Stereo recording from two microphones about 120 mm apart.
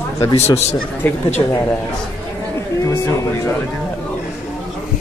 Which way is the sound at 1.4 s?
25° left (ahead or behind).